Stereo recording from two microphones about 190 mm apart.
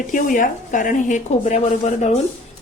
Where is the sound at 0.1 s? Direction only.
45° left (ahead or behind).